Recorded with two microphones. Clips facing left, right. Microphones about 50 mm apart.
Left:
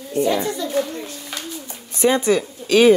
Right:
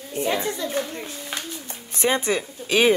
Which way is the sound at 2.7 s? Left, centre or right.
Centre.